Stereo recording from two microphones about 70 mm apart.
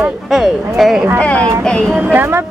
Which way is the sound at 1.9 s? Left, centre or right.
Right.